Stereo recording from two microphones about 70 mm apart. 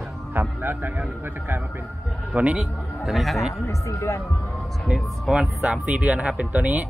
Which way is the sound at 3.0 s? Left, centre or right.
Centre.